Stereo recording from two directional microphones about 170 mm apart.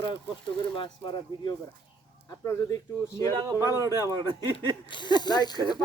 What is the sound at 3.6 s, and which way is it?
Speech, 20° left (ahead or behind).